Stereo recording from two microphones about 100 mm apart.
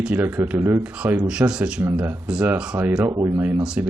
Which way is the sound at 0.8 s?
10° right (ahead or behind).